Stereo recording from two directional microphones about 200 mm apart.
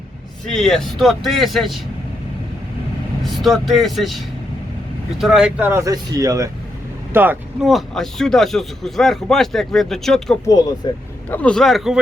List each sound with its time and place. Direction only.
0.4 s speech: centre (ahead or behind)
3.2 s speech: centre (ahead or behind)
10.8 s speech: 20° left (ahead or behind)
11.3 s speech: 5° left (ahead or behind)